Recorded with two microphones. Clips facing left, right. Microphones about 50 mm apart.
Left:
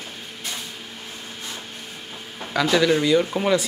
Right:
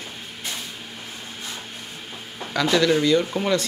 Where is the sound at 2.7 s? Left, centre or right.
Centre.